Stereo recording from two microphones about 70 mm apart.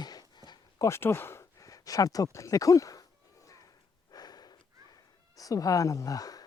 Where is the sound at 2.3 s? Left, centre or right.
Left.